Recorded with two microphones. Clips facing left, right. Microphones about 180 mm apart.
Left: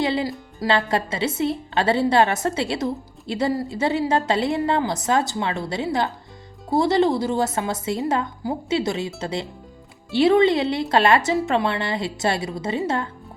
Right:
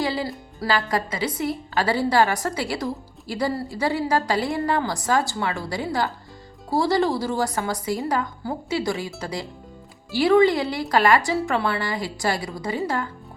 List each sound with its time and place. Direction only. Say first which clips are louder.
0.0 s a woman's voice: left 3 dB; 20° left (ahead or behind)